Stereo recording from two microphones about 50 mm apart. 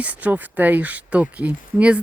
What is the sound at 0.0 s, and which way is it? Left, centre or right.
Speech, right.